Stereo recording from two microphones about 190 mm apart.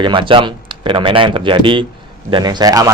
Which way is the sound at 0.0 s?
25° right (ahead or behind).